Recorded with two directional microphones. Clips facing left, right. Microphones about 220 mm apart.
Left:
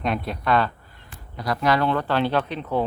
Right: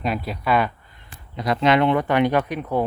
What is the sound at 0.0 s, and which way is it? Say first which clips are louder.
Speech: even; centre (ahead or behind).